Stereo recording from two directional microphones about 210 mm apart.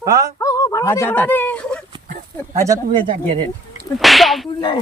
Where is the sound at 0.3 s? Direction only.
15° left (ahead or behind).